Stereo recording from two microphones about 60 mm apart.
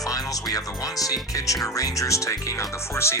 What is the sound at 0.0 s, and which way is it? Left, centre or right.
Speech, left.